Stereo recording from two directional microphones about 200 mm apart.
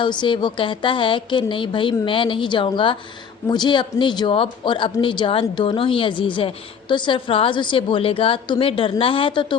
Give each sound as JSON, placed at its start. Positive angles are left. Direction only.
{"t": 0.0, "sound": "speech", "side_deg": 25}